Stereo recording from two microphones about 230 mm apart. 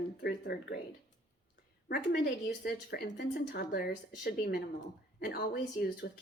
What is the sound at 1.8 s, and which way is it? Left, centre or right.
Speech, left.